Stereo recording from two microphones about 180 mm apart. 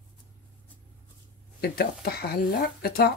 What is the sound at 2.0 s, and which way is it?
Speech, 60° left (ahead or behind).